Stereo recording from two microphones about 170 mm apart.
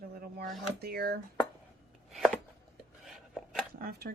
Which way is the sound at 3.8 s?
65° right (ahead or behind).